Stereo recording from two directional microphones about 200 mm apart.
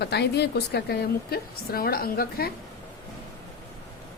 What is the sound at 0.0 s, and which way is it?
Speech, 55° left (ahead or behind).